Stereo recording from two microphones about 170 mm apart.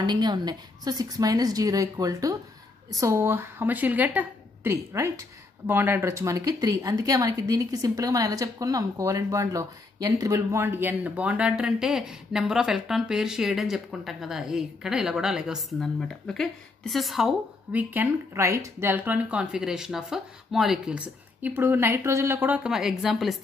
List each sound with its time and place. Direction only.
0.0 s a woman's voice: 25° right (ahead or behind); by 17.3 s centre (ahead or behind)
17.7 s speech: 15° right (ahead or behind)